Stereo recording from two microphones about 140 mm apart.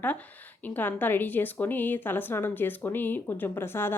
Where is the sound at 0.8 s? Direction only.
15° left (ahead or behind).